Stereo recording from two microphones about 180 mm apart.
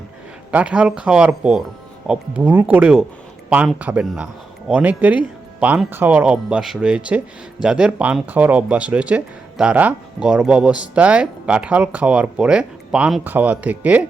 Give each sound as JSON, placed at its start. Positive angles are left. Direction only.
{"t": 0.5, "sound": "speech", "side_deg": -5}